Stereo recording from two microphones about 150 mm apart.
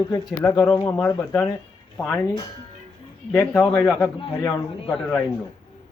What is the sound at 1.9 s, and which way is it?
Speech, 15° left (ahead or behind).